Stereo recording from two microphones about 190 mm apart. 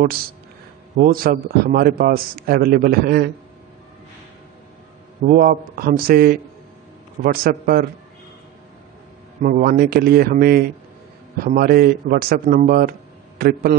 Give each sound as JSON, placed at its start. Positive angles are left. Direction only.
{"t": 0.9, "sound": "a man's voice", "side_deg": -50}
{"t": 5.2, "sound": "a man's voice", "side_deg": -50}
{"t": 7.4, "sound": "a man's voice", "side_deg": -50}
{"t": 9.4, "sound": "a man's voice", "side_deg": -45}